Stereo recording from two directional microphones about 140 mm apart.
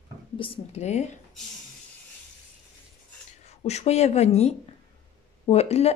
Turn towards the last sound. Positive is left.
turn(degrees=50)  # may be behind; listen again after turning